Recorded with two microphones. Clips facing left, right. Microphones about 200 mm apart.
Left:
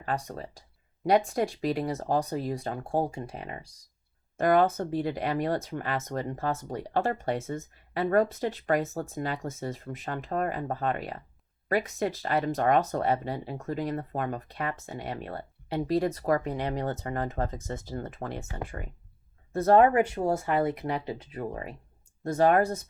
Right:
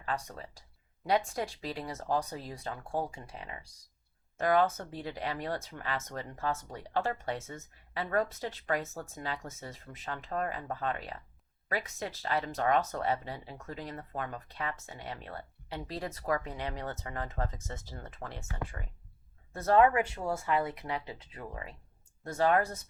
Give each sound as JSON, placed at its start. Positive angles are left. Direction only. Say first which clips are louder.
{"t": 0.0, "sound": "speech", "louder": "left 5 dB", "side_deg": 45}
{"t": 1.6, "sound": "speech", "louder": "left 8 dB", "side_deg": 55}
{"t": 2.7, "sound": "speech", "louder": "left 4 dB", "side_deg": 40}
{"t": 12.2, "sound": "speech", "louder": "left 3 dB", "side_deg": 50}
{"t": 12.8, "sound": "speech", "louder": "left 6 dB", "side_deg": 35}
{"t": 13.1, "sound": "speech", "louder": "left 8 dB", "side_deg": 50}
{"t": 19.5, "sound": "speech", "louder": "left 5 dB", "side_deg": 45}